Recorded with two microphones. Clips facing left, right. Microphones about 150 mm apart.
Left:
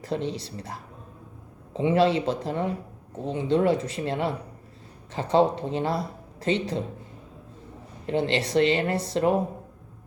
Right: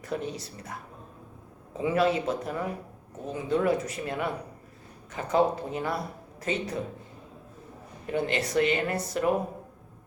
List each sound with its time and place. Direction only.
0.0 s speech: 25° left (ahead or behind)
8.0 s speech: 25° left (ahead or behind)